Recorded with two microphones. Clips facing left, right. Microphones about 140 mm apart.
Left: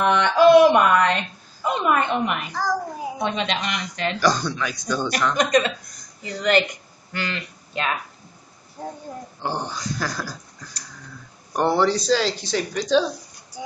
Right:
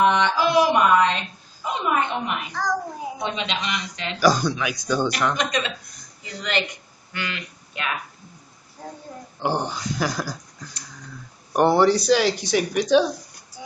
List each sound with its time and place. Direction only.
0.0 s a sound: 55° left (ahead or behind)
2.5 s child singing: 5° left (ahead or behind)
3.2 s a man's voice: 50° left (ahead or behind)
4.2 s speech: 10° right (ahead or behind)
5.4 s a man's voice: 45° left (ahead or behind)
9.4 s speech: 15° right (ahead or behind)
11.5 s speech: 15° right (ahead or behind)